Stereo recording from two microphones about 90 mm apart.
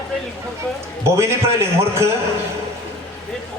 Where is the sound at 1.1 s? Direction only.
30° right (ahead or behind).